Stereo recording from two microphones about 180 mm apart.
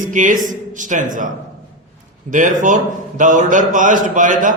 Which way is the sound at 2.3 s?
45° right (ahead or behind).